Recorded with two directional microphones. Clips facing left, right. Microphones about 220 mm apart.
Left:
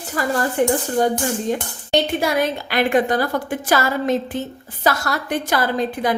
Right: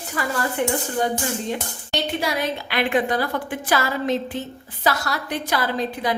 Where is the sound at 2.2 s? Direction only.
45° left (ahead or behind).